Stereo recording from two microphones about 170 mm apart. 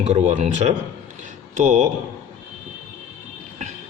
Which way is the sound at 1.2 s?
45° right (ahead or behind).